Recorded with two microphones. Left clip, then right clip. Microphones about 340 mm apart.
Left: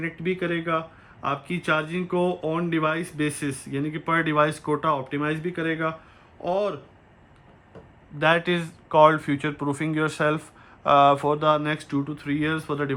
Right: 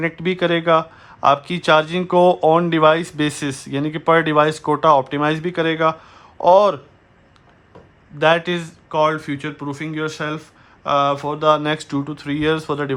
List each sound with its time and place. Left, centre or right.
0.0 s speech: centre
8.2 s speech: centre